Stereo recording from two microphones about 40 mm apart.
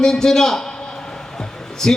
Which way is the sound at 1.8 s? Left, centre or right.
Centre.